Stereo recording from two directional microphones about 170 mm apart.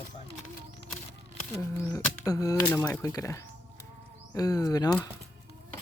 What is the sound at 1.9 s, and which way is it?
Speech, 20° left (ahead or behind).